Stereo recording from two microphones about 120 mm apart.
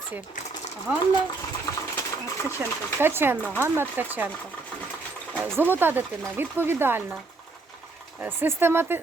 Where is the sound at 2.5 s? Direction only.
20° right (ahead or behind).